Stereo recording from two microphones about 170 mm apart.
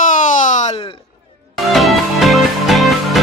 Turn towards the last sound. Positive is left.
turn(degrees=0)  # may be behind; listen again after turning